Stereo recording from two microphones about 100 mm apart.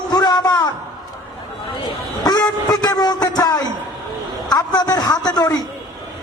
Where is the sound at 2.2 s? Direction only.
40° left (ahead or behind).